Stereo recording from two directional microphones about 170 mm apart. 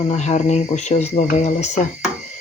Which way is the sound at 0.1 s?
40° left (ahead or behind).